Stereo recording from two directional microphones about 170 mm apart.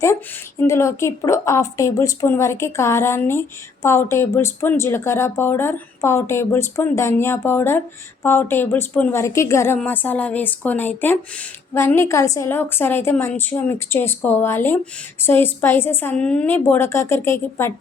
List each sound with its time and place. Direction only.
0.6 s a woman's voice: 15° left (ahead or behind)